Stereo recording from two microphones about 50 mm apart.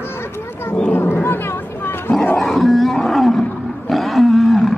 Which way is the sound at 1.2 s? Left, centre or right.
Left.